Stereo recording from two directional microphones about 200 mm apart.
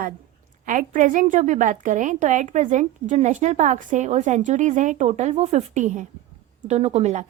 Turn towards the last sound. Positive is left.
turn(degrees=-35)  # may be behind; listen again after turning